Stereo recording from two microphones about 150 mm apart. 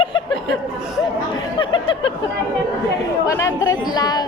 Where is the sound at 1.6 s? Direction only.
35° left (ahead or behind).